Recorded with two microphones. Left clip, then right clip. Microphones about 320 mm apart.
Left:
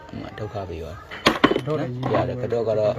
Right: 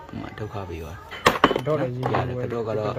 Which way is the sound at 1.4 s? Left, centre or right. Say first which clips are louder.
Even; right.